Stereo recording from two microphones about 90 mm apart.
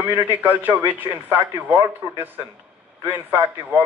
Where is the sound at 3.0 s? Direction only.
20° right (ahead or behind).